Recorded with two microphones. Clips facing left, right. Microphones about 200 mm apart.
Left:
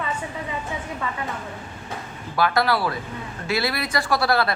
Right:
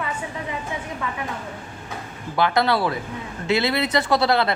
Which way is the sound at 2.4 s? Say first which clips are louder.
Right 1 dB; 20° right (ahead or behind).